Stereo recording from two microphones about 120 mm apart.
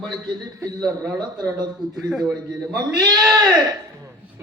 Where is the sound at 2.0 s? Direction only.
Centre (ahead or behind).